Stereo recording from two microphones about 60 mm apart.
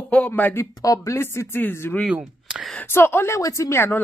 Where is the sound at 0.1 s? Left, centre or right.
Left.